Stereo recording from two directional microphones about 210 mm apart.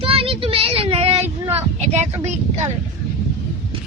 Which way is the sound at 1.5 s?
30° right (ahead or behind).